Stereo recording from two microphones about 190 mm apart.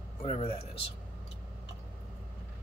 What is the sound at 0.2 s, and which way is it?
Speech, 30° left (ahead or behind).